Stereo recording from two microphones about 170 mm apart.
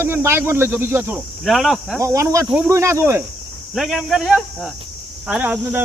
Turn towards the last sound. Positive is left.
turn(degrees=-10)  # may be behind; listen again after turning